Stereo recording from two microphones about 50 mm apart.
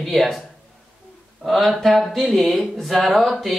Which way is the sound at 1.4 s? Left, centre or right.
Centre.